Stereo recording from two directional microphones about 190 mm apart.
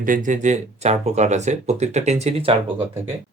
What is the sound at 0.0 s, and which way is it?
Speech, 45° right (ahead or behind).